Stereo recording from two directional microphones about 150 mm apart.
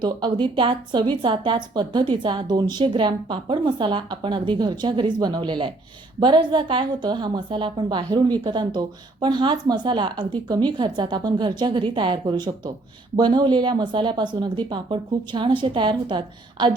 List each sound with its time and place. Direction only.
0.0 s speech: 30° right (ahead or behind)